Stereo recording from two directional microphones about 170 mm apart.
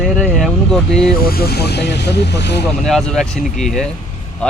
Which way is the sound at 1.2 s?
65° left (ahead or behind).